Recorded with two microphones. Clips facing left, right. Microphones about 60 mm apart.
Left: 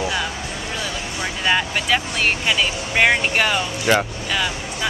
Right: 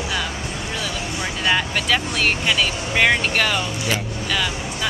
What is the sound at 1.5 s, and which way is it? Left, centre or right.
Speech, centre.